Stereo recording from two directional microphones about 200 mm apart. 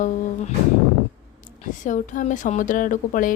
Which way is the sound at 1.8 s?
40° left (ahead or behind).